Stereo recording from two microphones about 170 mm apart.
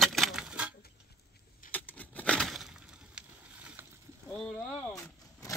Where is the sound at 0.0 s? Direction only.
Centre (ahead or behind).